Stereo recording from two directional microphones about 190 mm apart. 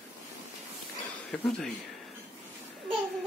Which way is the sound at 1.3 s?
5° left (ahead or behind).